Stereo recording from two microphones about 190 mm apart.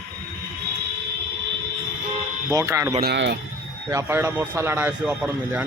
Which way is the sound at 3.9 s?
15° right (ahead or behind).